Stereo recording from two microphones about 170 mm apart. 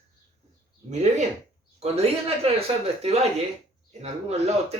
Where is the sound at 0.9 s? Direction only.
40° right (ahead or behind).